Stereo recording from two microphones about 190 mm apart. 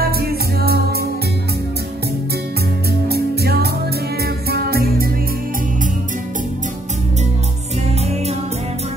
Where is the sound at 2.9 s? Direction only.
55° right (ahead or behind).